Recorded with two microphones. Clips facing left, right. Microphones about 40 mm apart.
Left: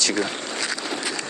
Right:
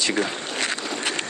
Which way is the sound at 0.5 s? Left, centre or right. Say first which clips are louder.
Right 3 dB; right.